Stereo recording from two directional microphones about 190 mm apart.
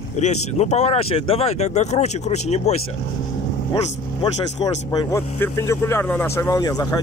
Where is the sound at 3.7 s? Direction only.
20° left (ahead or behind).